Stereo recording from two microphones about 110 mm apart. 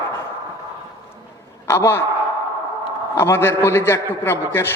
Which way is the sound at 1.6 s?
25° left (ahead or behind).